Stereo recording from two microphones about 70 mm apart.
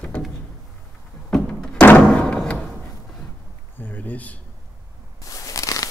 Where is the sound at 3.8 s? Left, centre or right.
Left.